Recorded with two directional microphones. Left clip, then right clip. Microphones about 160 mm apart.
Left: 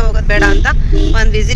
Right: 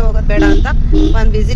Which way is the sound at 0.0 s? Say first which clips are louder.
Left 1 dB; 5° right (ahead or behind).